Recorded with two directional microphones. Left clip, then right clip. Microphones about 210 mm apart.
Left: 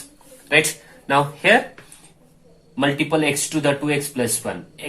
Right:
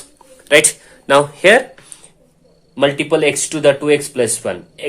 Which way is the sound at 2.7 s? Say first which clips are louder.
Right 5 dB; 40° right (ahead or behind).